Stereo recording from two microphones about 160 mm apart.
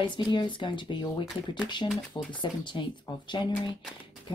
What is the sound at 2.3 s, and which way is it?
Speech, 30° left (ahead or behind).